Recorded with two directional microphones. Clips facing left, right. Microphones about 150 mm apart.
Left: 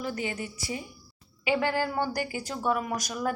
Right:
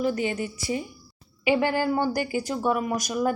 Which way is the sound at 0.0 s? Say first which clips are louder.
Right 7 dB; 25° right (ahead or behind).